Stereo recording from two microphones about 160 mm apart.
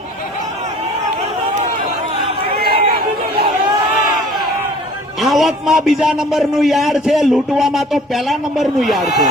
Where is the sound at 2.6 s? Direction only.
75° right (ahead or behind).